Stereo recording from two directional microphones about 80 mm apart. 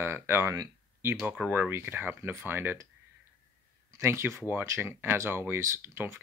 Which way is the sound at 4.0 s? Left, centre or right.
Right.